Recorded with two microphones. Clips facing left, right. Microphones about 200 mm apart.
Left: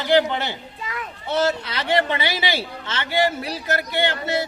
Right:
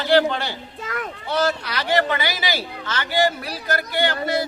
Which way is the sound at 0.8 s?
45° right (ahead or behind).